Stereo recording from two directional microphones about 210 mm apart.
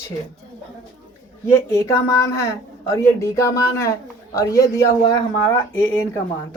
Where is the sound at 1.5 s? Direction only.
15° left (ahead or behind).